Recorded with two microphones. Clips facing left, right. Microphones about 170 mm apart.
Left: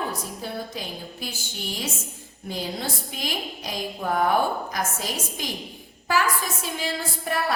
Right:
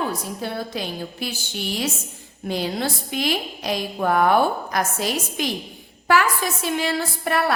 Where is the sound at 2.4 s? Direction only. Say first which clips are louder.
Right 6 dB; 75° right (ahead or behind).